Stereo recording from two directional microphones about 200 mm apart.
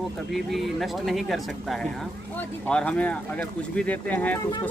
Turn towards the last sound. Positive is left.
turn(degrees=10)  # may be behind; listen again after turning